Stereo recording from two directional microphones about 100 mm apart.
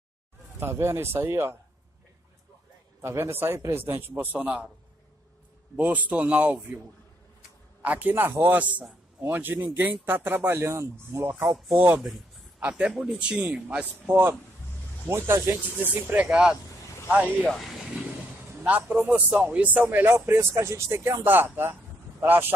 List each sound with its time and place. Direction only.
0.6 s speech: 25° right (ahead or behind)
3.0 s speech: 25° right (ahead or behind)
5.8 s a man's voice: 15° right (ahead or behind)
7.8 s a man's voice: 15° right (ahead or behind)
11.7 s a man's voice: 15° right (ahead or behind)
17.4 s speech: 5° left (ahead or behind)
18.6 s a man's voice: 15° right (ahead or behind)